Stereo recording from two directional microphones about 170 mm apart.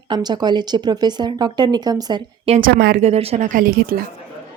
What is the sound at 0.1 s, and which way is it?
Speech, 25° right (ahead or behind).